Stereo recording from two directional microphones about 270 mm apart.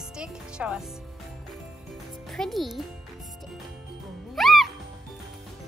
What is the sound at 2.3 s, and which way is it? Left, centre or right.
Speech, centre.